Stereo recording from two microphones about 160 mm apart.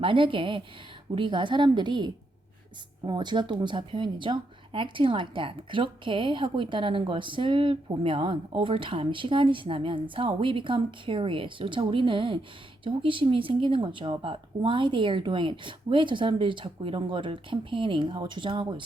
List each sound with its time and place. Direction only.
0.0 s speech: 35° right (ahead or behind)
3.1 s speech: 30° right (ahead or behind)